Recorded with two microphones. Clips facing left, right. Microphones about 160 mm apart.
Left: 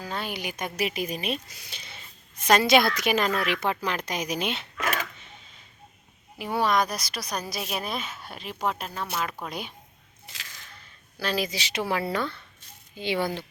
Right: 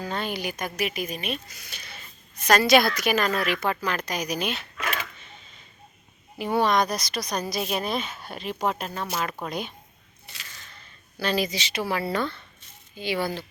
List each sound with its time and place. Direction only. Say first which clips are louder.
0.0 s a woman's voice: right 3 dB; 5° left (ahead or behind); by 4.7 s 25° left (ahead or behind)
4.8 s creak: left 3 dB; 45° left (ahead or behind)
6.4 s speech: right 2 dB; 5° left (ahead or behind)
11.2 s speech: right 2 dB; centre (ahead or behind)
11.7 s speech: left 2 dB; 15° left (ahead or behind)
13.0 s a woman's voice: even; 20° left (ahead or behind)